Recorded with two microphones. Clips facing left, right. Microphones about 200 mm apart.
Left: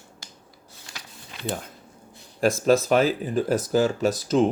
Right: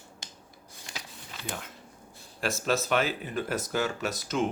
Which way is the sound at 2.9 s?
35° left (ahead or behind).